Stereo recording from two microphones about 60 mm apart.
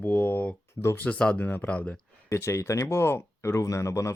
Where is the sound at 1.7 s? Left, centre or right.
Left.